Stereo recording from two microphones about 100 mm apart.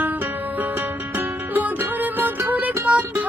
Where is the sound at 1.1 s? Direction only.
20° right (ahead or behind).